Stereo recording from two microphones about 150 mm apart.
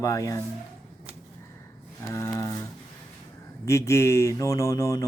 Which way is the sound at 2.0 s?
20° left (ahead or behind).